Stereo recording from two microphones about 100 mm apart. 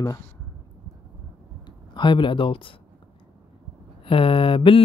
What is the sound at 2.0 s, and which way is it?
Speech, 55° left (ahead or behind).